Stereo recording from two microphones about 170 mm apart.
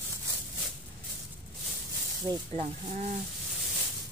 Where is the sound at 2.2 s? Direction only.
25° right (ahead or behind).